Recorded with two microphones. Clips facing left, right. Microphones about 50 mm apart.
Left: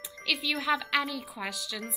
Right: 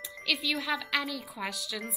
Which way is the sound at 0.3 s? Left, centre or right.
Centre.